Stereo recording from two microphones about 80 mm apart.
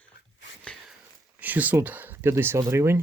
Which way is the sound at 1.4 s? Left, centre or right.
Right.